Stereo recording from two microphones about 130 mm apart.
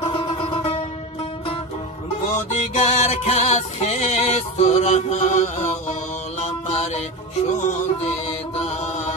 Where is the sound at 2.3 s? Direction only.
60° left (ahead or behind).